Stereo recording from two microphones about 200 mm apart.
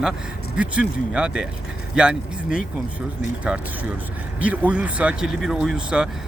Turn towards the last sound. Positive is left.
turn(degrees=-5)  # may be behind; listen again after turning